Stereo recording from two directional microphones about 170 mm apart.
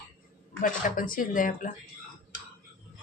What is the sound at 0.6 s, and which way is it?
Speech, 50° left (ahead or behind).